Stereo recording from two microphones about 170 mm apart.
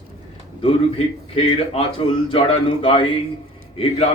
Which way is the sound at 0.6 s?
35° left (ahead or behind).